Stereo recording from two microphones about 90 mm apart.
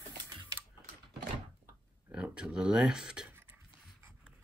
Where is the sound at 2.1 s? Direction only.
10° right (ahead or behind).